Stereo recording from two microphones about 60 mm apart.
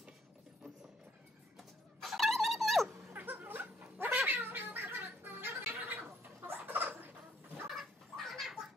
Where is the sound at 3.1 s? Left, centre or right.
Right.